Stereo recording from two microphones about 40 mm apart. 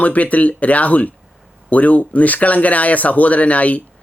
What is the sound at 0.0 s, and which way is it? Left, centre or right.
Speech, left.